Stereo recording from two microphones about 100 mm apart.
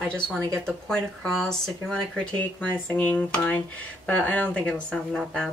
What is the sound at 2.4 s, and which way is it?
Speech, 15° left (ahead or behind).